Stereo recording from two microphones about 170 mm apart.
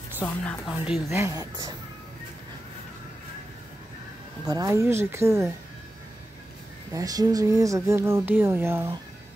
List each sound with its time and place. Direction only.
0.2 s a woman's voice: 10° left (ahead or behind)
1.0 s speech: 15° right (ahead or behind)
4.5 s speech: 20° right (ahead or behind)
6.9 s speech: 20° right (ahead or behind)